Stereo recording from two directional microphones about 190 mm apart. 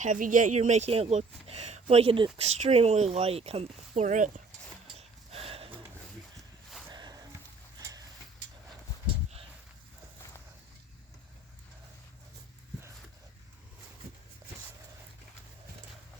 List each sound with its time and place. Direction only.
0.0 s speech: 45° right (ahead or behind)
4.9 s snort: 30° right (ahead or behind)
6.9 s a sound: 20° right (ahead or behind)